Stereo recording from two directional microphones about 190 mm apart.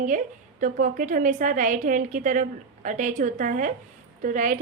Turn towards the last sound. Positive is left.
turn(degrees=-45)  # may be behind; listen again after turning